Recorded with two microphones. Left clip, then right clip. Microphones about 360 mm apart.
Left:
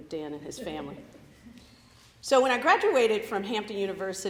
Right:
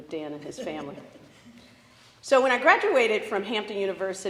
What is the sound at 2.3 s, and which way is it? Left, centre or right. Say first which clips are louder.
A woman's voice: right 2 dB; left.